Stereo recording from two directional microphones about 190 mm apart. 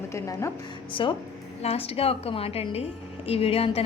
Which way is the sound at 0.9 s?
25° left (ahead or behind).